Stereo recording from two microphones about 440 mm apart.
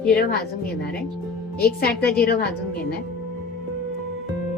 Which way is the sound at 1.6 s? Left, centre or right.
Left.